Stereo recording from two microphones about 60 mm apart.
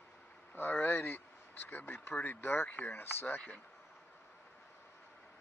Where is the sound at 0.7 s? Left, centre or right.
Left.